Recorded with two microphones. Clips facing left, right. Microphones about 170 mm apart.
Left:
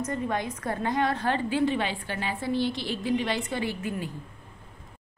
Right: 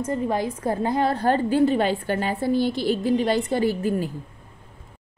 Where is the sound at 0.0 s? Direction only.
30° right (ahead or behind).